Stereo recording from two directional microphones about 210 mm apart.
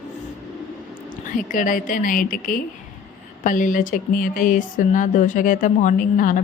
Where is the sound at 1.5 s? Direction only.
40° left (ahead or behind).